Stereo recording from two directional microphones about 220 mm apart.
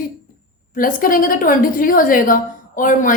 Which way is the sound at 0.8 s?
40° left (ahead or behind).